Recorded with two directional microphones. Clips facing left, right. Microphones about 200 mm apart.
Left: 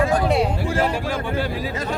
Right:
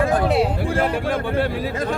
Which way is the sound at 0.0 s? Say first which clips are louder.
Right 1 dB; 55° right (ahead or behind).